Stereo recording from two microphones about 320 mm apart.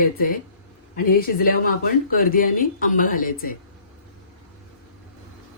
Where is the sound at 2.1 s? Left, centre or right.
Left.